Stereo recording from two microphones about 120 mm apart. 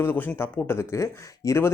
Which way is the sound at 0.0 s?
20° left (ahead or behind).